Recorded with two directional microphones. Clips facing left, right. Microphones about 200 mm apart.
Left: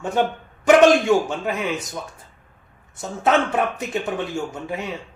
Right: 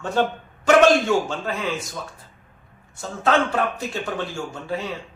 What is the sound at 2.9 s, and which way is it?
A man's voice, 20° left (ahead or behind).